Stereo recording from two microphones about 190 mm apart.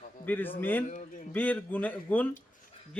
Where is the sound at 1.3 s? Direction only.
10° left (ahead or behind).